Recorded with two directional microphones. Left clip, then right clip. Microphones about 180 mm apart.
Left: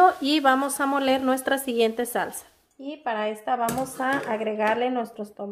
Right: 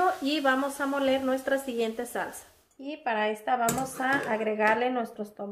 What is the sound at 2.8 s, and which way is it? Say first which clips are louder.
Speech: left 1 dB; 15° left (ahead or behind).